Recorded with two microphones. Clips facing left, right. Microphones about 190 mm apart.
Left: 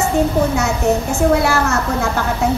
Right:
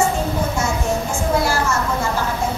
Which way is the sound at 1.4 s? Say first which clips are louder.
Left 3 dB; 65° left (ahead or behind).